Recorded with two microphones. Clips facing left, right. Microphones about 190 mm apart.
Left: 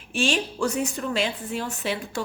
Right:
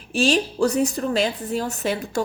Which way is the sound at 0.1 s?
35° right (ahead or behind).